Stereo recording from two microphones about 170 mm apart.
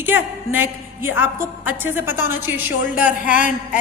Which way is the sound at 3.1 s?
50° left (ahead or behind).